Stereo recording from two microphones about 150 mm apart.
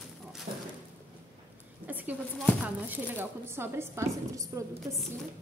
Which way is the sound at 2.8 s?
15° right (ahead or behind).